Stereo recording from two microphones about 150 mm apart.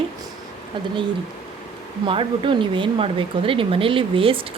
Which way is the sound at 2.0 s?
35° right (ahead or behind).